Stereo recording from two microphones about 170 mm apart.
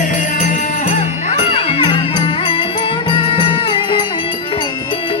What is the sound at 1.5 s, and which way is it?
Music, 30° left (ahead or behind).